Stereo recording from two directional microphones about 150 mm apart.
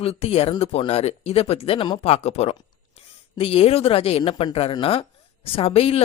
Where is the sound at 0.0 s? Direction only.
40° left (ahead or behind).